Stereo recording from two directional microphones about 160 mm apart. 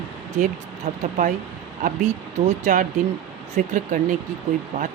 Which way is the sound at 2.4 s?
50° right (ahead or behind).